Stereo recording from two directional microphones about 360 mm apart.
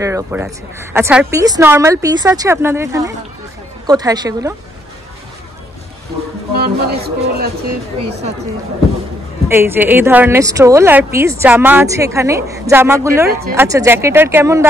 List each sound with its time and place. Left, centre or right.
0.0 s a woman's voice: centre
6.5 s speech: right
9.5 s a woman's voice: centre
13.3 s speech: right
13.6 s a woman's voice: centre